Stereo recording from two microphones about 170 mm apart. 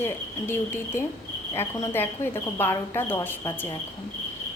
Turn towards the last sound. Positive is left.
turn(degrees=10)  # may be behind; listen again after turning